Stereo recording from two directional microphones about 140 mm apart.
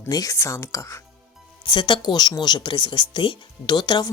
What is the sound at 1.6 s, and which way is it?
Speech, 35° left (ahead or behind).